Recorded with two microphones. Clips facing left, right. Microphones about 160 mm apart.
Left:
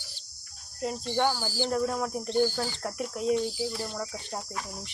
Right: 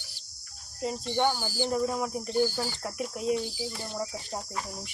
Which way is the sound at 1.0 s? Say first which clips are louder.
Even; 15° right (ahead or behind).